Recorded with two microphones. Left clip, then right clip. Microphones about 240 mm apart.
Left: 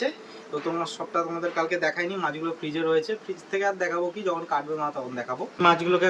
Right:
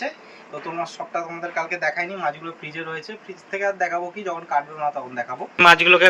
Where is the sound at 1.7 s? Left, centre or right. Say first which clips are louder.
Right 2 dB; centre.